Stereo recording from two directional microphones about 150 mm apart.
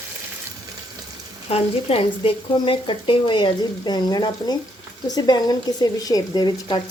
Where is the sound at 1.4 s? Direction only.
40° left (ahead or behind).